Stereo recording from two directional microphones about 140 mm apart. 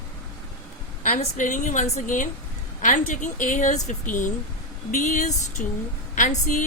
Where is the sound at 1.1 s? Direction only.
65° left (ahead or behind).